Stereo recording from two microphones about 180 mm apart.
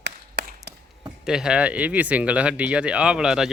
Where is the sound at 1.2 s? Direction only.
5° right (ahead or behind).